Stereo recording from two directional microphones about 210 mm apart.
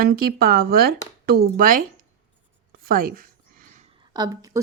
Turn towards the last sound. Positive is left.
turn(degrees=-15)  # may be behind; listen again after turning